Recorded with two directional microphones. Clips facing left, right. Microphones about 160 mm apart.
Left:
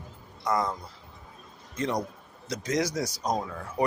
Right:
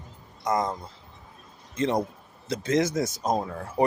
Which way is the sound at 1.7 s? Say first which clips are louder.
Right 4 dB; 25° right (ahead or behind).